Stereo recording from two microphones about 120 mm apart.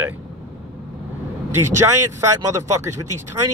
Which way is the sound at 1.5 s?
20° right (ahead or behind).